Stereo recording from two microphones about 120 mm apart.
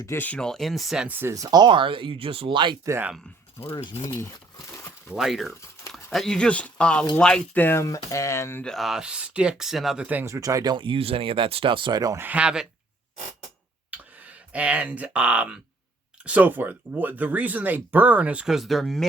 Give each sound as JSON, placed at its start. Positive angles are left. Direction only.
{"t": 0.0, "sound": "speech", "side_deg": 25}
{"t": 0.3, "sound": "speech", "side_deg": 5}
{"t": 1.3, "sound": "speech", "side_deg": -30}
{"t": 2.8, "sound": "speech", "side_deg": -25}
{"t": 4.2, "sound": "crumpling", "side_deg": 25}
{"t": 5.1, "sound": "speech", "side_deg": 0}
{"t": 8.6, "sound": "speech", "side_deg": 0}
{"t": 10.1, "sound": "speech", "side_deg": -20}
{"t": 12.1, "sound": "speech", "side_deg": -15}
{"t": 13.9, "sound": "a sound", "side_deg": -10}
{"t": 16.2, "sound": "speech", "side_deg": -15}